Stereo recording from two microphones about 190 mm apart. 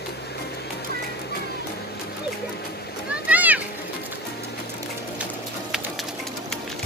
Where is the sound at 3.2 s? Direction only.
10° right (ahead or behind).